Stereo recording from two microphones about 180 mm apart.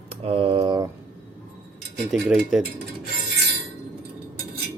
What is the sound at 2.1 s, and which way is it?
Speech, 5° right (ahead or behind).